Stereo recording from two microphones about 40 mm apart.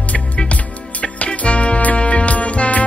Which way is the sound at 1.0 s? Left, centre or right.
Left.